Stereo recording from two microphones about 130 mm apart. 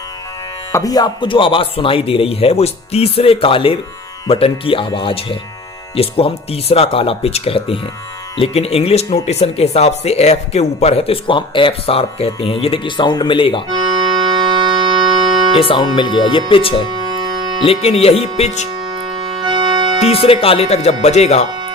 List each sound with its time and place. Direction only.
0.7 s speech: 25° left (ahead or behind)
13.7 s music: 35° right (ahead or behind)
15.6 s speech: 40° left (ahead or behind)
16.9 s music: 35° right (ahead or behind)
17.7 s speech: 50° left (ahead or behind)
18.9 s music: 35° right (ahead or behind)
20.2 s speech: 45° left (ahead or behind)